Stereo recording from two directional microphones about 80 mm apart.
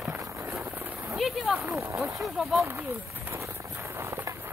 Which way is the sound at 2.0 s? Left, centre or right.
Centre.